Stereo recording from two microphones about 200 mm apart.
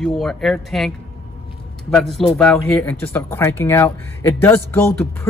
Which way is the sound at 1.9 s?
Centre (ahead or behind).